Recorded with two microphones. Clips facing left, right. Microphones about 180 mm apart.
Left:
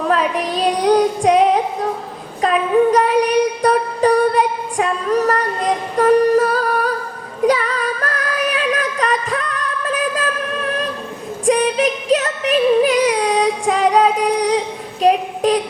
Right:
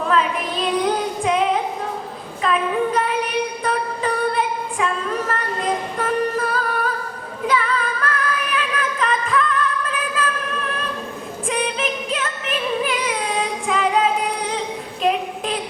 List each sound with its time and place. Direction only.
0.1 s female singing: 40° left (ahead or behind)
2.4 s music: 40° left (ahead or behind)
6.0 s humming: 40° left (ahead or behind)
7.4 s music: 40° left (ahead or behind)
11.4 s music: 40° left (ahead or behind)
15.0 s a sound: 40° left (ahead or behind)